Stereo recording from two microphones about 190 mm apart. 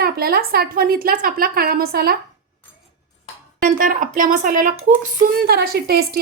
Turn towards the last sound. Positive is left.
turn(degrees=-55)  # may be behind; listen again after turning